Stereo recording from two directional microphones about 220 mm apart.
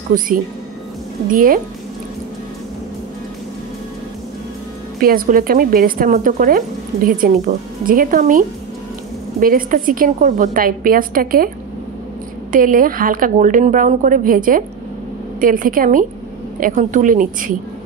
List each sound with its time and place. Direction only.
1.3 s speech: 40° right (ahead or behind)
5.0 s speech: 40° right (ahead or behind)
12.5 s speech: 40° right (ahead or behind)